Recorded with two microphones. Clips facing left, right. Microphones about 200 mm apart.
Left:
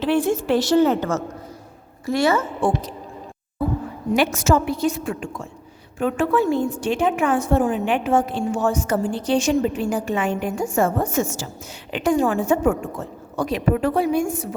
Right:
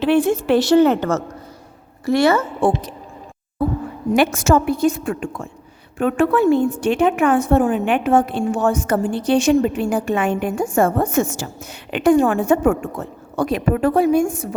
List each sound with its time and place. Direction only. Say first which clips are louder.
0.0 s a woman's voice: right 4 dB; 65° right (ahead or behind)
4.1 s a woman's voice: right 3 dB; 50° right (ahead or behind)